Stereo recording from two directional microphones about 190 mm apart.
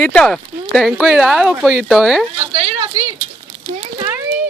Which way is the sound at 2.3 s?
30° right (ahead or behind).